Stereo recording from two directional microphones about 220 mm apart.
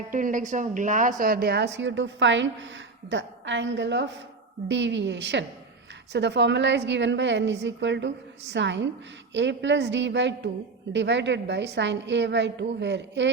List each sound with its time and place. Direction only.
0.1 s a woman's voice: 35° right (ahead or behind); by 13.3 s 55° right (ahead or behind)